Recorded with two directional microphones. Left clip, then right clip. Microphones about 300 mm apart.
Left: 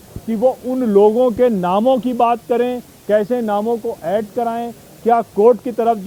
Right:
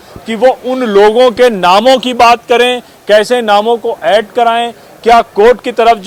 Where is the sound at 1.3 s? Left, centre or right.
Centre.